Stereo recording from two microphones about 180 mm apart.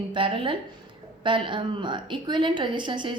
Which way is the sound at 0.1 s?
30° right (ahead or behind).